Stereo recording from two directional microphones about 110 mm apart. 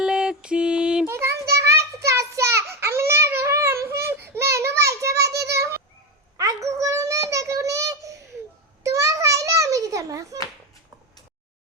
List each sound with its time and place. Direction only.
0.0 s music: 5° right (ahead or behind)
1.0 s child singing: 25° right (ahead or behind)
6.3 s a sound: 30° right (ahead or behind)